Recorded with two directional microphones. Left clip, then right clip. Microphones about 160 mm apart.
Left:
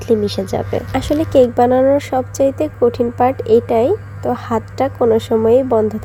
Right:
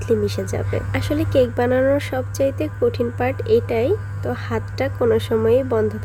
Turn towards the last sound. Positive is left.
turn(degrees=15)  # may be behind; listen again after turning